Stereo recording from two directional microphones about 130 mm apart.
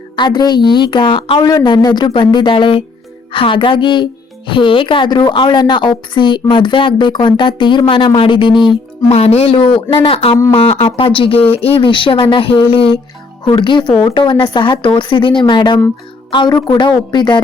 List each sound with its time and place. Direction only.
0.2 s speech: 35° left (ahead or behind)
1.4 s speech: 30° left (ahead or behind)
9.0 s speech: 50° left (ahead or behind); by 17.4 s 35° left (ahead or behind)